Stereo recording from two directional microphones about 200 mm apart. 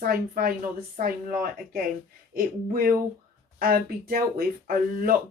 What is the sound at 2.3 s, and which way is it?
Speech, 45° right (ahead or behind).